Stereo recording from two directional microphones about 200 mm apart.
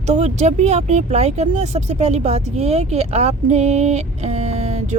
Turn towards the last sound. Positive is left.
turn(degrees=-35)  # may be behind; listen again after turning